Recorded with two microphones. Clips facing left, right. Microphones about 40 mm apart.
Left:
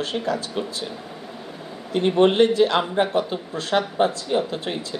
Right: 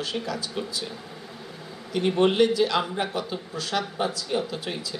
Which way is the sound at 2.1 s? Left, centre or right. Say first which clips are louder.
Left 4 dB; left.